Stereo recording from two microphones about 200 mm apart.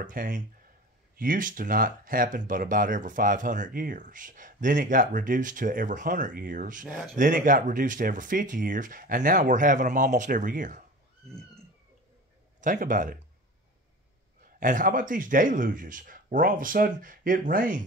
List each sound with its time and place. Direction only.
0.0 s speech: 40° right (ahead or behind)
12.5 s speech: 40° right (ahead or behind)
14.6 s speech: 40° right (ahead or behind)